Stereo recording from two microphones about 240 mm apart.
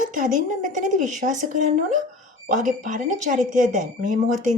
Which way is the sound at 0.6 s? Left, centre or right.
Right.